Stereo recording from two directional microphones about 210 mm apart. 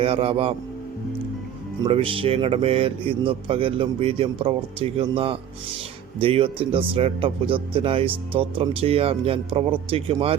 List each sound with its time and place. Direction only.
0.0 s speech: 25° right (ahead or behind)
1.8 s speech: 25° right (ahead or behind)